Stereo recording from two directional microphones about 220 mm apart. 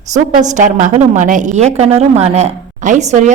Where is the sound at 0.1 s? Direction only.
35° right (ahead or behind).